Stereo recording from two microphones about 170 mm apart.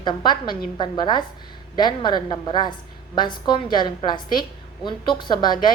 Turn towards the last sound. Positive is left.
turn(degrees=25)  # may be behind; listen again after turning